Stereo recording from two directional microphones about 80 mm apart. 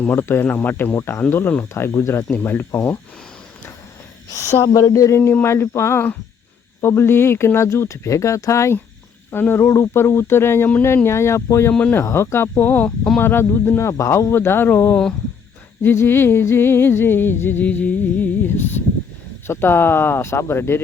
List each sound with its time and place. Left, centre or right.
0.2 s speech: left
0.5 s music: left
0.9 s speech: left
1.3 s music: left
1.7 s speech: left
2.3 s music: left
4.7 s speech: left
11.7 s speech: centre
11.9 s music: left
13.1 s speech: left
15.8 s music: left